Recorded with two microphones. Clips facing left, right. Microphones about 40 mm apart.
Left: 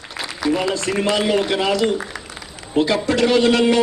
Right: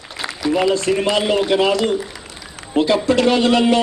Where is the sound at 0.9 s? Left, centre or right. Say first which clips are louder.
Right 2 dB; centre.